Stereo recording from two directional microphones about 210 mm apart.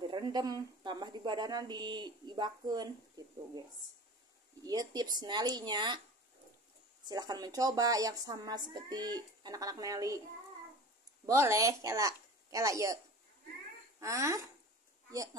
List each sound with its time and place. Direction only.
0.0 s a woman's voice: 20° right (ahead or behind)
4.6 s a woman's voice: 20° right (ahead or behind)
7.1 s speech: 20° right (ahead or behind)
11.2 s speech: 15° right (ahead or behind)